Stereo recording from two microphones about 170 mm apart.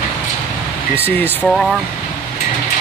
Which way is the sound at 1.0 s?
10° left (ahead or behind).